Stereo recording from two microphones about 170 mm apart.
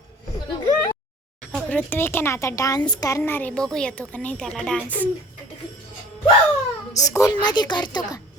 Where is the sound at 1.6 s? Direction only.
10° left (ahead or behind).